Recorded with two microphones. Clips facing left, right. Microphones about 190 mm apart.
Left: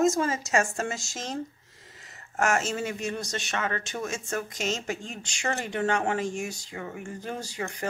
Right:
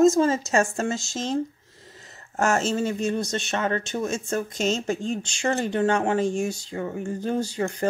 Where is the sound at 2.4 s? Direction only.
30° right (ahead or behind).